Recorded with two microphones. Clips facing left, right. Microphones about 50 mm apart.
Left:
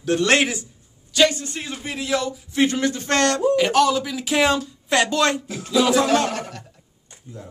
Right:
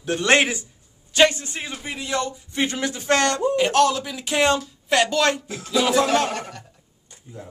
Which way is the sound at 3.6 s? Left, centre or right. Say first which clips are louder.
Left 1 dB; centre.